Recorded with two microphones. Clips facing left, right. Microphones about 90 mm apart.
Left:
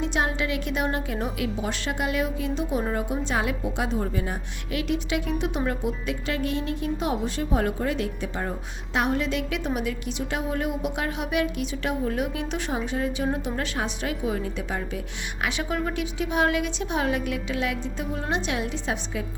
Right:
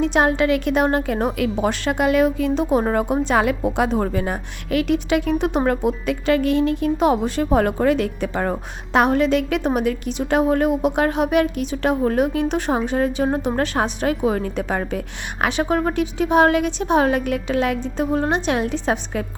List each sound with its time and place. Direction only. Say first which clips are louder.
0.0 s a woman's voice: right 9 dB; 55° right (ahead or behind)
5.6 s a woman's voice: right 8 dB; 65° right (ahead or behind)
8.9 s a woman's voice: right 9 dB; 55° right (ahead or behind)
14.3 s a woman's voice: right 7 dB; 55° right (ahead or behind)